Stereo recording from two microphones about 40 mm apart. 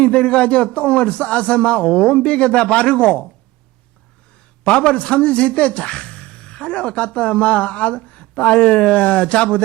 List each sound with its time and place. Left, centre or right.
0.0 s a man's voice: left
4.6 s a man's voice: left